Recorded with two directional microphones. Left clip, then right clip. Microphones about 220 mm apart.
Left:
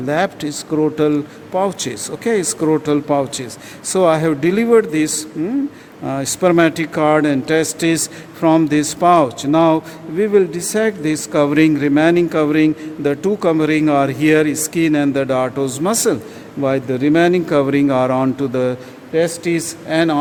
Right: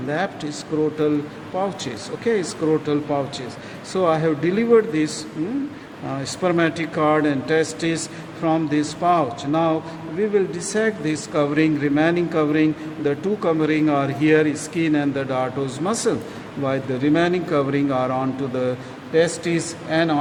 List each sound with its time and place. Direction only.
0.1 s speech: 50° left (ahead or behind)